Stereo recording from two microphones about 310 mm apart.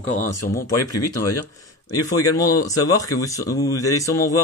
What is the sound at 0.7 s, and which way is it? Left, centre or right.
Speech, centre.